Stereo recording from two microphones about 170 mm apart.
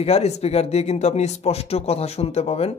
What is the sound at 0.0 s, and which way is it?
Speech, 40° left (ahead or behind).